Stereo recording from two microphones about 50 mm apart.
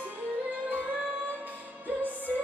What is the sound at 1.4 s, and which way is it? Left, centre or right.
Music, right.